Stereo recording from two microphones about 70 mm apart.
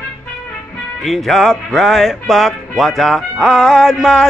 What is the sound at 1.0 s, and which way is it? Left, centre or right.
A man's voice, centre.